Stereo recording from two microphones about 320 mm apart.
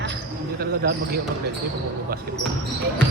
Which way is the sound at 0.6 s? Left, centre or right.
Right.